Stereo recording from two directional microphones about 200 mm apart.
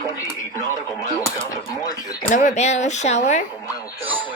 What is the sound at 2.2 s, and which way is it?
Speech, 40° left (ahead or behind).